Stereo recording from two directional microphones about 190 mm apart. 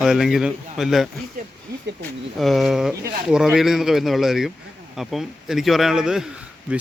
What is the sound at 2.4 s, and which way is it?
Speech, centre (ahead or behind).